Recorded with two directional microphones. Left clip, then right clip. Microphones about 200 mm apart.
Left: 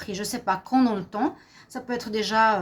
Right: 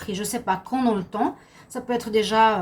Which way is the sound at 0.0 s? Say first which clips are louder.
Right 1 dB; 40° left (ahead or behind).